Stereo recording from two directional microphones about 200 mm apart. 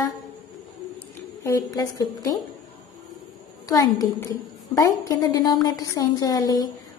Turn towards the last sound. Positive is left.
turn(degrees=20)  # may be behind; listen again after turning